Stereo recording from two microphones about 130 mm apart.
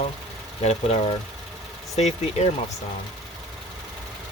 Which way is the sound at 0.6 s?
55° left (ahead or behind).